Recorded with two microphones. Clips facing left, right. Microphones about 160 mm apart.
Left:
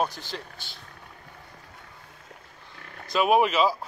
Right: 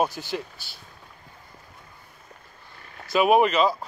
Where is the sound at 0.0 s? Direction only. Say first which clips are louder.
Right 4 dB; 10° right (ahead or behind).